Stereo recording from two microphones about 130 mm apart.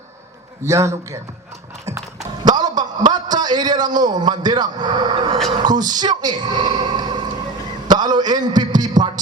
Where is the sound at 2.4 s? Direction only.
30° right (ahead or behind).